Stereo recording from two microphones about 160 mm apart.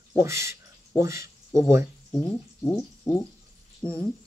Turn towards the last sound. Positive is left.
turn(degrees=5)  # may be behind; listen again after turning